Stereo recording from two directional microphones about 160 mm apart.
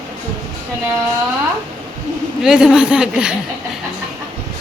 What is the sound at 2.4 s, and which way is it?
Speech, 5° right (ahead or behind).